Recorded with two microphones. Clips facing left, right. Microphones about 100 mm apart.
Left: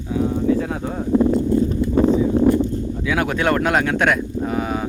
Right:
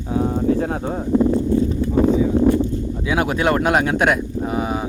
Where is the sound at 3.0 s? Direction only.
20° right (ahead or behind).